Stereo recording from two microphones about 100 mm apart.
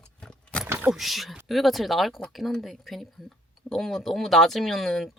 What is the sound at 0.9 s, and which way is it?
Speech, centre (ahead or behind).